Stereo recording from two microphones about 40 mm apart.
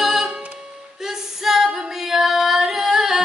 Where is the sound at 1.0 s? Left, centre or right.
Centre.